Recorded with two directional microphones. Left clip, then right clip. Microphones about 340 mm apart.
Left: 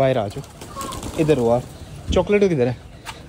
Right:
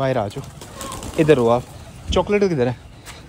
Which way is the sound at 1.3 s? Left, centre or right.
Right.